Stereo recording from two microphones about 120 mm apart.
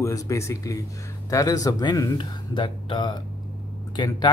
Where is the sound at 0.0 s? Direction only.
25° left (ahead or behind).